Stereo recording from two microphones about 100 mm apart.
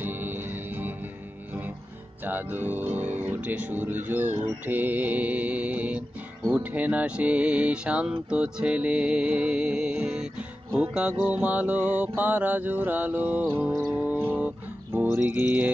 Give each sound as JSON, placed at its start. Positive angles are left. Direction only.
{"t": 0.0, "sound": "music", "side_deg": -20}
{"t": 2.2, "sound": "speech", "side_deg": -20}
{"t": 13.9, "sound": "music", "side_deg": -15}
{"t": 15.2, "sound": "speech", "side_deg": -20}